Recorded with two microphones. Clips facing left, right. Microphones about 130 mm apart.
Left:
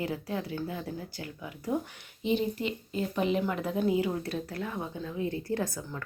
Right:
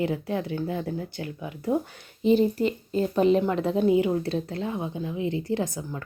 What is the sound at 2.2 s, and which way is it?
Speech, 40° right (ahead or behind).